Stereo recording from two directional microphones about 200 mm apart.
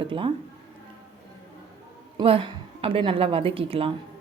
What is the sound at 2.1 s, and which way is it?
A woman's voice, 25° right (ahead or behind).